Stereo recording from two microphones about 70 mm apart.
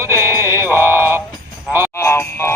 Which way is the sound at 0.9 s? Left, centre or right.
Right.